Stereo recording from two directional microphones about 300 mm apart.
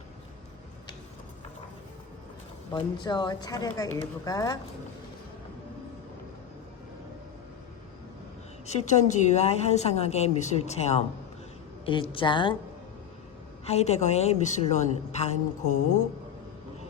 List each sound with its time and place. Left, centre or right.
2.7 s speech: centre
8.6 s a woman's voice: left
13.7 s a woman's voice: left